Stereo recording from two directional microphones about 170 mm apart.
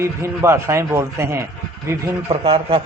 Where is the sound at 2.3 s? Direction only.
35° right (ahead or behind).